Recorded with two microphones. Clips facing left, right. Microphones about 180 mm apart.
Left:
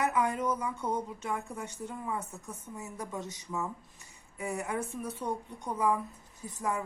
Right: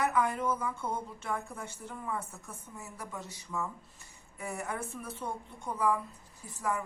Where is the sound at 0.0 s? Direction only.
20° left (ahead or behind).